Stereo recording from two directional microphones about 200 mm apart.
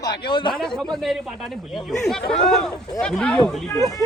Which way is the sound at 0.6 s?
Centre (ahead or behind).